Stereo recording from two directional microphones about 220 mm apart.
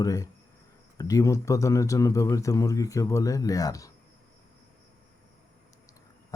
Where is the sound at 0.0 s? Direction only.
15° left (ahead or behind).